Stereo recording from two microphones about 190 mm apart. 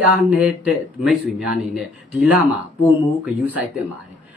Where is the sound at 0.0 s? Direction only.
5° right (ahead or behind).